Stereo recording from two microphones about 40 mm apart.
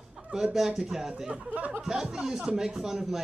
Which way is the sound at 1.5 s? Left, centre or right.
Right.